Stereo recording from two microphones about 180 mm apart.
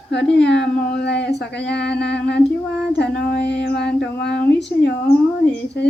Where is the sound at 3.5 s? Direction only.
70° left (ahead or behind).